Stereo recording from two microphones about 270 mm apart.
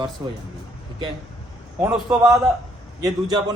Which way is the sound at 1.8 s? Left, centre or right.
Centre.